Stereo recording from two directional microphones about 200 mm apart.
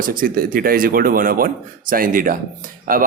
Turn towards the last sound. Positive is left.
turn(degrees=-45)  # may be behind; listen again after turning